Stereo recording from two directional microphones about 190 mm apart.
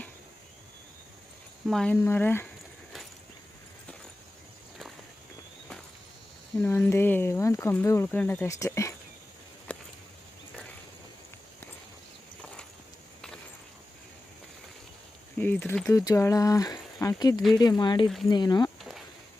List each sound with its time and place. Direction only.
1.6 s speech: 5° left (ahead or behind)
6.6 s speech: 10° left (ahead or behind)
9.7 s a sound: 10° left (ahead or behind)
15.4 s speech: 10° left (ahead or behind)
15.9 s speech: 15° left (ahead or behind)